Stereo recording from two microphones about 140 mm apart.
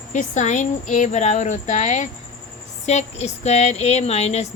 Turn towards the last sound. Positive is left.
turn(degrees=50)  # may be behind; listen again after turning